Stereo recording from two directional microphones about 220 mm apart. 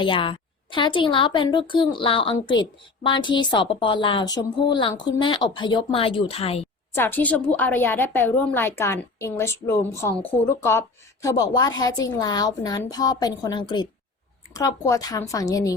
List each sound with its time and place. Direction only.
0.0 s a woman's voice: 20° left (ahead or behind)
6.9 s a woman's voice: 10° left (ahead or behind)